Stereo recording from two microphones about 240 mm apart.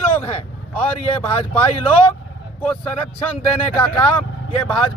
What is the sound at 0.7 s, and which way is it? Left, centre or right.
Speech, centre.